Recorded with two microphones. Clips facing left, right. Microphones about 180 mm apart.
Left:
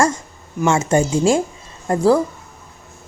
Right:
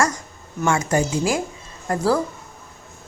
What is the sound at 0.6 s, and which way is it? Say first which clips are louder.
Speech: left 4 dB; 25° left (ahead or behind).